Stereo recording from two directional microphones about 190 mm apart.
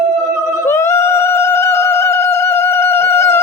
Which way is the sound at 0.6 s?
15° left (ahead or behind).